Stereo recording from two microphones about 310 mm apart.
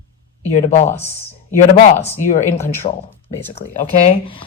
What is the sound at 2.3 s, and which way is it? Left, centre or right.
Speech, left.